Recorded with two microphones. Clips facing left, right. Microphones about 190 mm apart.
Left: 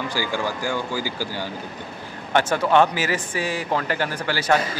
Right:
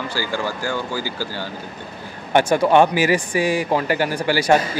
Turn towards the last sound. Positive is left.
turn(degrees=-15)  # may be behind; listen again after turning